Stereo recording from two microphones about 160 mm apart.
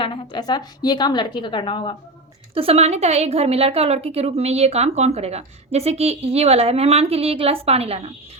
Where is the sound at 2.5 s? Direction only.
35° right (ahead or behind).